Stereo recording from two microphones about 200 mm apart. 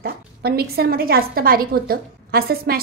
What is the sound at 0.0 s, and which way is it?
A woman's voice, 50° right (ahead or behind).